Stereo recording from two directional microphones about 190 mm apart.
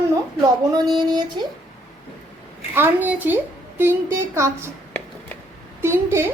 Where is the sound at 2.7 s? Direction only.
10° right (ahead or behind).